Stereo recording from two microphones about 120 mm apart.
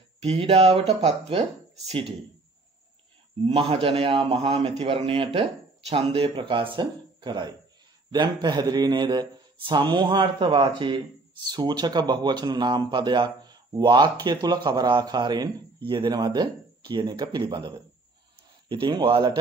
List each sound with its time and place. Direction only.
0.2 s a man's voice: 55° right (ahead or behind)
3.4 s a man's voice: 55° right (ahead or behind)